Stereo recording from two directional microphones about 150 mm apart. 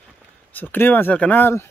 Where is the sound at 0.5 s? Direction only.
15° left (ahead or behind).